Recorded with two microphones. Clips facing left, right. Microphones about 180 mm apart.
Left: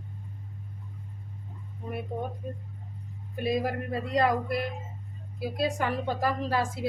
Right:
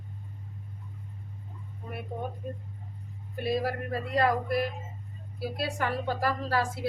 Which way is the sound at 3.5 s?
20° left (ahead or behind).